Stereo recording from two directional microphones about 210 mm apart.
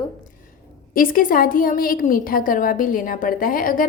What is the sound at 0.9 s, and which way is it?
A woman's voice, 40° left (ahead or behind).